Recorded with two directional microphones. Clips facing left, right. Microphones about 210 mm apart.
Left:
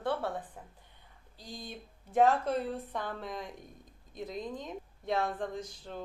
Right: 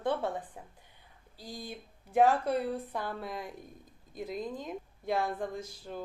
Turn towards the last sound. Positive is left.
turn(degrees=-5)  # may be behind; listen again after turning